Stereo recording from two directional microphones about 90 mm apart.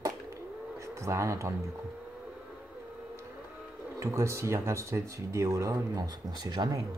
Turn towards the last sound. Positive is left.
turn(degrees=-45)  # may be behind; listen again after turning